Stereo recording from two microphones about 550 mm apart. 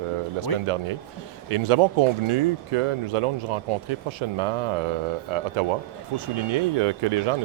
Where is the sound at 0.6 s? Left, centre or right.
Right.